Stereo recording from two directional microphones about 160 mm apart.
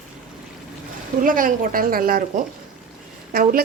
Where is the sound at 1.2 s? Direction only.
60° right (ahead or behind).